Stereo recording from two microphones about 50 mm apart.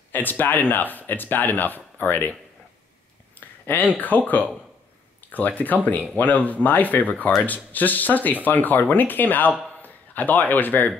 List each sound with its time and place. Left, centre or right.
0.1 s speech: left
3.3 s a sound: left
5.3 s a man's voice: left